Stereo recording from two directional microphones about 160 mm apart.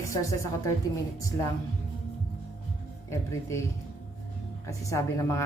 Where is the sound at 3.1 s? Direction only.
15° left (ahead or behind).